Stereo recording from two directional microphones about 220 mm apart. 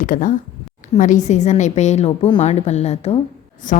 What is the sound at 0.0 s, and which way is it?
A woman's voice, 35° left (ahead or behind).